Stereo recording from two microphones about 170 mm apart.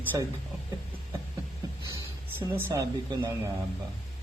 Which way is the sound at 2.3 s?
15° right (ahead or behind).